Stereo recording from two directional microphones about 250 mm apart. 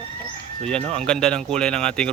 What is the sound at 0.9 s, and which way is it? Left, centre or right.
Speech, centre.